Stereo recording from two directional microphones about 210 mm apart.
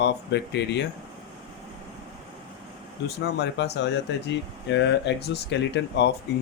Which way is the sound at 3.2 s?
55° left (ahead or behind).